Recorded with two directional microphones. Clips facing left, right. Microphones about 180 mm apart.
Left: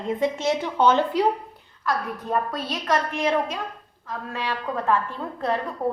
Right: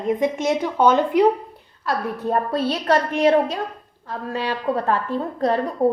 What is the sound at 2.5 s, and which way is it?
A woman's voice, 30° right (ahead or behind).